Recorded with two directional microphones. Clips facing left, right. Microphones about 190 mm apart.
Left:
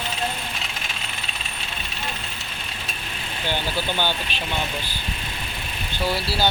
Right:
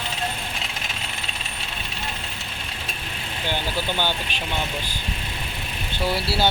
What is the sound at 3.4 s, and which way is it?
Speech, 15° right (ahead or behind).